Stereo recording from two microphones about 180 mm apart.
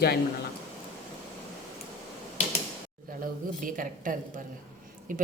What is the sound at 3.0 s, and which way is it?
A woman's voice, 50° right (ahead or behind).